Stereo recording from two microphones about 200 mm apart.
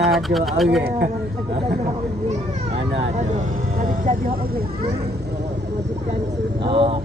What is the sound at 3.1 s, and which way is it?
Speech, 35° right (ahead or behind).